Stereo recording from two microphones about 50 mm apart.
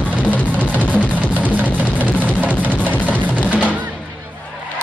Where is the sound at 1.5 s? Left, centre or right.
Right.